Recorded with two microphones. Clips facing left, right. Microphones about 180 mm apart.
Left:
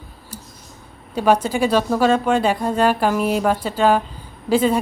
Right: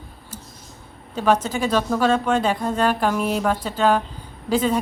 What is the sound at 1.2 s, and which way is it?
A woman's voice, 10° left (ahead or behind).